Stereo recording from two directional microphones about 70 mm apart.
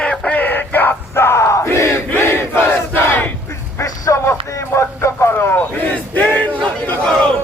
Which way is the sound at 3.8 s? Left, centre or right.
Left.